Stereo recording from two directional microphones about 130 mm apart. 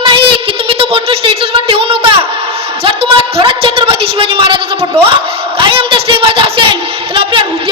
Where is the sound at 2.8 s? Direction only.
45° right (ahead or behind).